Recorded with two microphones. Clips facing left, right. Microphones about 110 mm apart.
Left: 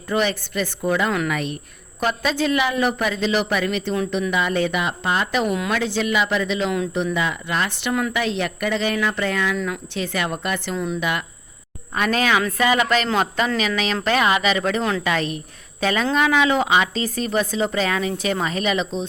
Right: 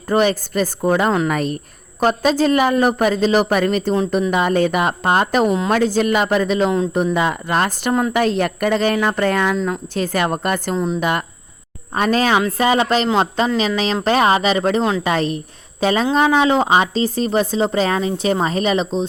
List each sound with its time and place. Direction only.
0.1 s a woman's voice: 40° right (ahead or behind)
10.8 s a woman's voice: 25° right (ahead or behind)
14.8 s a woman's voice: 20° right (ahead or behind)
15.0 s a woman's voice: 35° right (ahead or behind)